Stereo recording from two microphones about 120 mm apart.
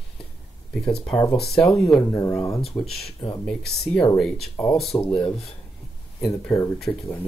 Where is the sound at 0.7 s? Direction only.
5° left (ahead or behind).